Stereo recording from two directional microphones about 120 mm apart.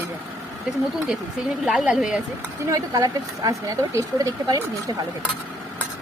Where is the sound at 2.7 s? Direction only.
30° right (ahead or behind).